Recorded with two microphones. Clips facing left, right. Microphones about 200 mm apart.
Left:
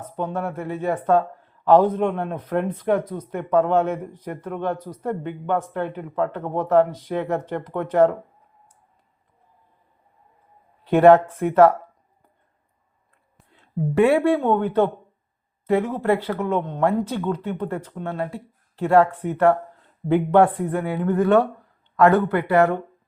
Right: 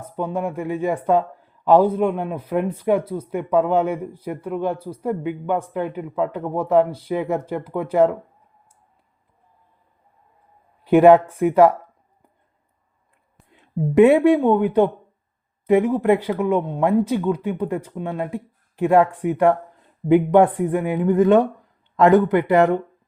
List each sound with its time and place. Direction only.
0.0 s a man's voice: 10° right (ahead or behind)
10.8 s a man's voice: 10° right (ahead or behind)
13.5 s a man's voice: 15° right (ahead or behind)